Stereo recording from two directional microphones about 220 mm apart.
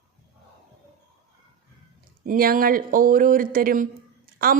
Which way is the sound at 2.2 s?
40° right (ahead or behind).